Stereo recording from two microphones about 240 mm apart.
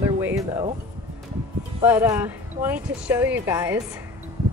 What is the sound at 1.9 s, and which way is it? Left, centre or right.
Speech, centre.